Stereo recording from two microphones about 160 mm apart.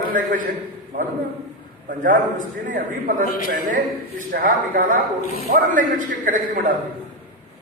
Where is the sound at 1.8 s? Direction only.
55° right (ahead or behind).